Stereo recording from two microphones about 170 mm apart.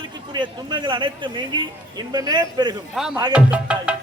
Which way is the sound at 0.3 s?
25° right (ahead or behind).